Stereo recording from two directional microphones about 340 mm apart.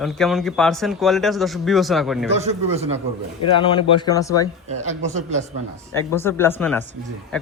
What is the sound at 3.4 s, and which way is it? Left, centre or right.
Speech, centre.